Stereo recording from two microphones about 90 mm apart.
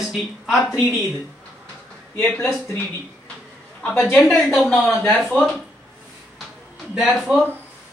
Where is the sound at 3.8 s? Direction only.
5° left (ahead or behind).